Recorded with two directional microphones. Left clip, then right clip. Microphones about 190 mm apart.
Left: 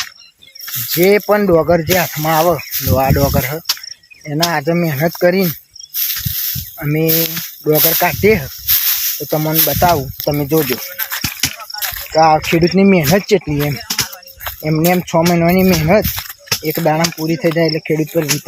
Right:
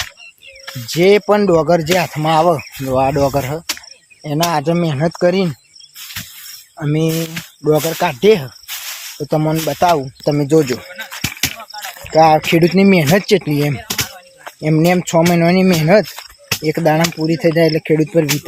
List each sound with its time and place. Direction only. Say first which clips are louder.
0.9 s speech: even; 15° right (ahead or behind)
6.7 s speech: left 1 dB; 15° right (ahead or behind)
8.6 s snake: left 8 dB; 60° left (ahead or behind)
9.3 s speech: even; 20° right (ahead or behind)
10.2 s speech: right 2 dB; 20° right (ahead or behind)
10.7 s a sound: left 2 dB; 15° right (ahead or behind)
12.1 s speech: right 1 dB; 20° right (ahead or behind)
14.6 s speech: right 1 dB; 25° right (ahead or behind)